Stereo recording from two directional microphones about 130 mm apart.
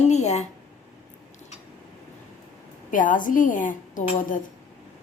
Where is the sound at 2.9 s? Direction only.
90° left.